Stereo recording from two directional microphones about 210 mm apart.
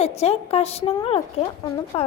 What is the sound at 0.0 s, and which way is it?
Speech, 30° left (ahead or behind).